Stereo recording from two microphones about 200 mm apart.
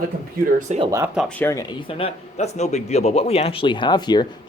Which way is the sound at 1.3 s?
10° left (ahead or behind).